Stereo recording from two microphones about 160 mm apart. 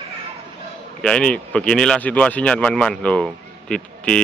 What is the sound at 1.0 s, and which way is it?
Speech, 5° left (ahead or behind).